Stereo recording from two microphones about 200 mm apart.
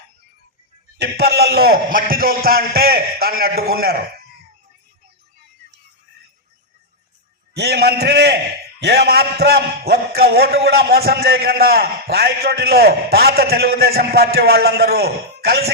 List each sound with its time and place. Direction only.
0.9 s a man's voice: 55° right (ahead or behind)
7.5 s a man's voice: 55° right (ahead or behind)